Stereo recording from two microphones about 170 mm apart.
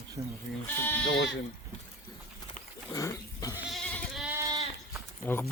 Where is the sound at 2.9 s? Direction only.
20° left (ahead or behind).